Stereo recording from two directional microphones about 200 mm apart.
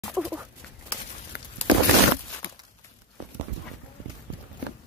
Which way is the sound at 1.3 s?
55° left (ahead or behind).